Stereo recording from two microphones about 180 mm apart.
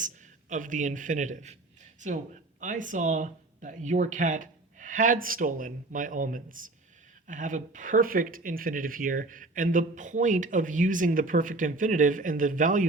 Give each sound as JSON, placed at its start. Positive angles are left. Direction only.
{"t": 0.5, "sound": "speech", "side_deg": -45}